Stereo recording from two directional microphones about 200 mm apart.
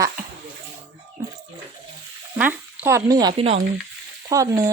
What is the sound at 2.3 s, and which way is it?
Speech, 10° right (ahead or behind).